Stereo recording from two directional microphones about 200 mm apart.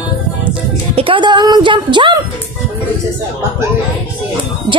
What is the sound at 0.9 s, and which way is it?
A woman's voice, 25° right (ahead or behind).